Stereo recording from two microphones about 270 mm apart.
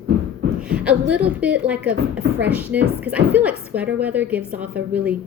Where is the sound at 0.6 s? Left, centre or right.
Centre.